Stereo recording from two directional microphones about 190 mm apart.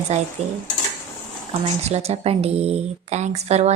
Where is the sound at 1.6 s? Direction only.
35° right (ahead or behind).